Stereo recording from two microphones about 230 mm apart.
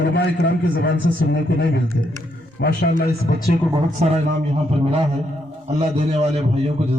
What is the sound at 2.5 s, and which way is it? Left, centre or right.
Speech, left.